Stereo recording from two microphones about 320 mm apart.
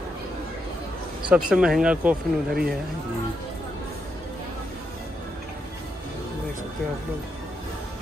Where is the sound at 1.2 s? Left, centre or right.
Centre.